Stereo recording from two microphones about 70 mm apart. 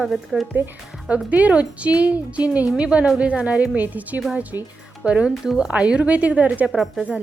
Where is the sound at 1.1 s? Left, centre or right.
Centre.